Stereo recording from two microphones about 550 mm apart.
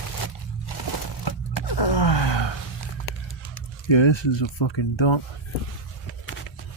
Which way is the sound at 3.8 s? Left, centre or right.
Left.